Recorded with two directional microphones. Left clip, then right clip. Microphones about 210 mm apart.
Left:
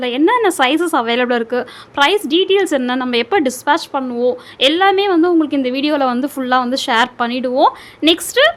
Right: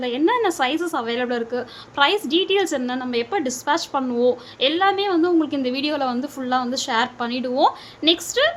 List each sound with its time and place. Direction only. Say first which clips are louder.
0.0 s a woman's voice: left 6 dB; 25° left (ahead or behind)
3.8 s speech: left 3 dB; 15° left (ahead or behind)
4.6 s a woman's voice: left 7 dB; 30° left (ahead or behind)
8.0 s a woman's voice: left 6 dB; 35° left (ahead or behind)